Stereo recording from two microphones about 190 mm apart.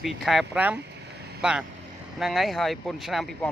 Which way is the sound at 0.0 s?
Centre (ahead or behind).